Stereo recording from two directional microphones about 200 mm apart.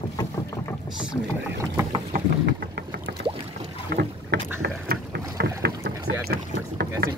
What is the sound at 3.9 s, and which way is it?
Boat, 50° right (ahead or behind).